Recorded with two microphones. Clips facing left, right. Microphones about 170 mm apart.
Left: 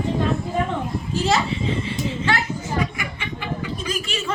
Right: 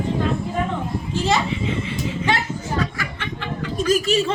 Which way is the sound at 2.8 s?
15° left (ahead or behind).